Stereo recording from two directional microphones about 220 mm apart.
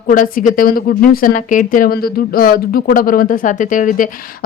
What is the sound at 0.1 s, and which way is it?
Speech, 40° left (ahead or behind).